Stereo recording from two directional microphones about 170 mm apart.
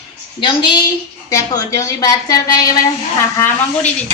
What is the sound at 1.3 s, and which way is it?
A woman's voice, 20° left (ahead or behind).